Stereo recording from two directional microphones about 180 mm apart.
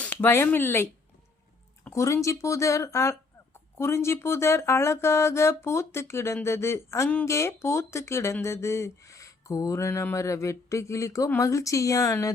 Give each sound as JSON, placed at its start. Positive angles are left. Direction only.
{"t": 0.0, "sound": "speech", "side_deg": 10}
{"t": 1.9, "sound": "speech", "side_deg": 15}